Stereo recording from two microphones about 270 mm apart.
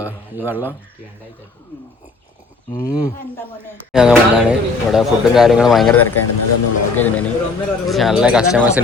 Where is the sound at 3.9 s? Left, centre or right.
Centre.